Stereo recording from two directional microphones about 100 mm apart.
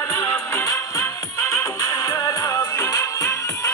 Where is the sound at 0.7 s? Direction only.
35° left (ahead or behind).